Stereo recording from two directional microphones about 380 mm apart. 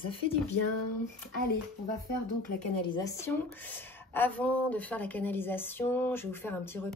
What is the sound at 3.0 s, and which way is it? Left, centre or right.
A woman's voice, centre.